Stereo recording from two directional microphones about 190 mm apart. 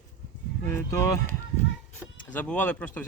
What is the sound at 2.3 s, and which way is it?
Speech, 5° left (ahead or behind).